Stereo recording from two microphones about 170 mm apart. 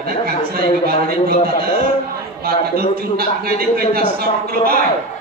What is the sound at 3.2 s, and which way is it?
A man's voice, 60° right (ahead or behind).